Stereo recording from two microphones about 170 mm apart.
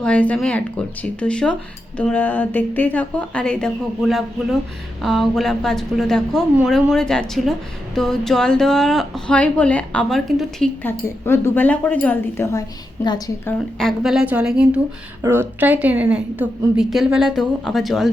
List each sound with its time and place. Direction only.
0.0 s a woman's voice: 5° left (ahead or behind)
10.8 s a woman's voice: 15° left (ahead or behind)
13.7 s a woman's voice: centre (ahead or behind)